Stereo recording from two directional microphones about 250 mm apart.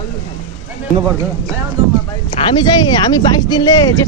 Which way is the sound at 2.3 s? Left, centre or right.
Left.